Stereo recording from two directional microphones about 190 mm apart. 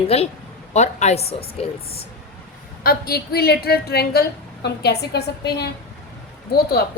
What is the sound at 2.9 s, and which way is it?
A woman's voice, 55° left (ahead or behind).